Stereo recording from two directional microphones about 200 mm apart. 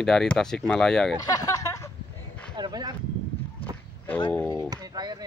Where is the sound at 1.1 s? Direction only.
15° left (ahead or behind).